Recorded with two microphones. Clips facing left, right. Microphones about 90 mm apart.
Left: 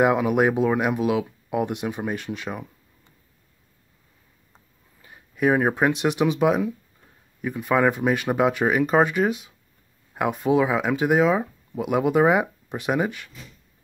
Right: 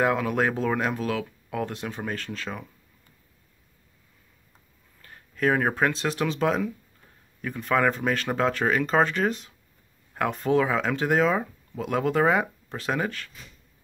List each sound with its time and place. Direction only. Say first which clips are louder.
0.0 s speech: left 5 dB; 15° left (ahead or behind)
5.0 s speech: left 3 dB; 10° left (ahead or behind)